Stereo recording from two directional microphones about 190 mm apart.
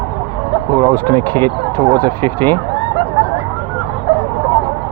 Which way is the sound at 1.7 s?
20° right (ahead or behind).